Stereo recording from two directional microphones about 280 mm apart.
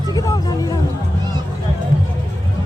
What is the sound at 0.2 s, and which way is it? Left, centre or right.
Music, centre.